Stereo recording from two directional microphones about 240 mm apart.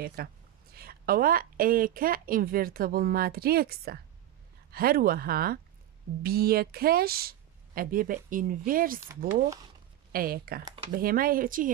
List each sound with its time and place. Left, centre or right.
0.0 s a woman's voice: right
9.3 s speech: centre
10.1 s a woman's voice: right